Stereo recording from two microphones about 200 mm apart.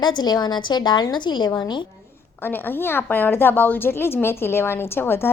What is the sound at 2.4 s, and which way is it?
A woman's voice, 10° left (ahead or behind).